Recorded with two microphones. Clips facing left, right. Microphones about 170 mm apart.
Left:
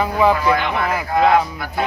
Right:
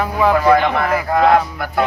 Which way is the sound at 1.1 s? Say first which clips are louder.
Right 1 dB; 55° right (ahead or behind).